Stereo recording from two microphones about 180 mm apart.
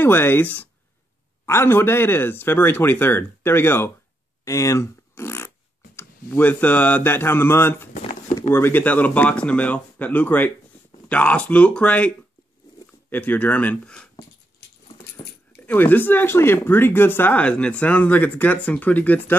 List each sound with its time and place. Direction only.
0.0 s speech: 10° left (ahead or behind)
7.9 s a sound: 45° left (ahead or behind)
8.4 s speech: 15° left (ahead or behind)
13.1 s speech: 10° left (ahead or behind)
15.2 s keys jangling: 25° left (ahead or behind)
15.5 s speech: 10° left (ahead or behind)